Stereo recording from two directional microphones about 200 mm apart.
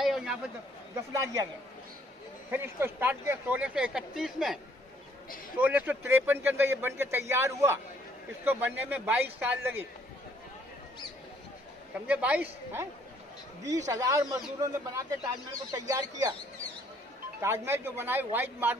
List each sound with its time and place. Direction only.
0.0 s a sound: 5° right (ahead or behind)
1.1 s speech: 15° right (ahead or behind)
2.5 s speech: 10° right (ahead or behind)
5.6 s speech: 5° right (ahead or behind)
12.1 s speech: 5° right (ahead or behind)
17.4 s speech: 10° right (ahead or behind)